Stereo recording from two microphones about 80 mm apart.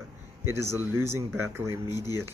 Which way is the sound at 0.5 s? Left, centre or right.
Right.